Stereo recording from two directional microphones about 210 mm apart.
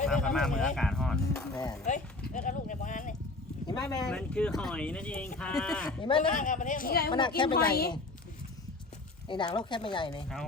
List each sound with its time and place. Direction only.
0.0 s speech: 5° left (ahead or behind)
1.8 s clip-clop: 35° left (ahead or behind)
3.7 s speech: 15° left (ahead or behind)
4.0 s speech: 5° left (ahead or behind)
6.0 s speech: 25° left (ahead or behind)
6.3 s a woman's voice: 40° left (ahead or behind)
7.1 s speech: 20° left (ahead or behind)
9.2 s speech: 20° left (ahead or behind)